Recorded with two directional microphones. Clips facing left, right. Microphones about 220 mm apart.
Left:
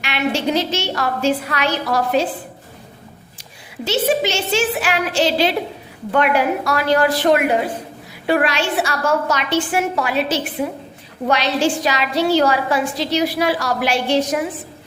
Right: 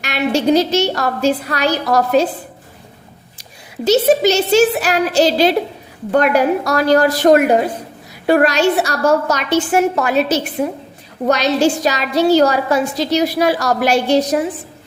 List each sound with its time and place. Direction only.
0.0 s a woman's voice: 40° right (ahead or behind)
3.8 s a woman's voice: 40° right (ahead or behind)